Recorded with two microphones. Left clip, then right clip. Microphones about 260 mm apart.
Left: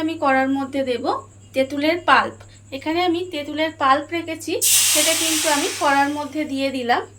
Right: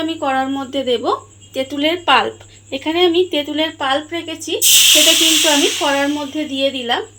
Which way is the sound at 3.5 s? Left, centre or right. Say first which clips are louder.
Left 3 dB; right.